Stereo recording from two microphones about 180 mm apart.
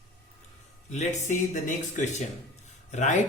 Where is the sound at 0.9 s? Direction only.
40° left (ahead or behind).